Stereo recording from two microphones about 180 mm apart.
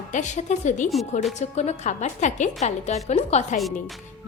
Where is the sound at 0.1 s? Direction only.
40° left (ahead or behind).